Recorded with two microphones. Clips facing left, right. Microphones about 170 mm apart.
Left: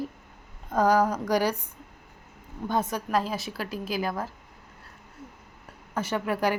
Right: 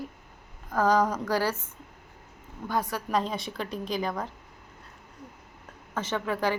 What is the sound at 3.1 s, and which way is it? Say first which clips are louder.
A woman's voice: left 1 dB; 5° left (ahead or behind).